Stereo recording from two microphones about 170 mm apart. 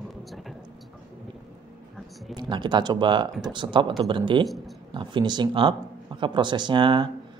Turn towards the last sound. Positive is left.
turn(degrees=-30)  # may be behind; listen again after turning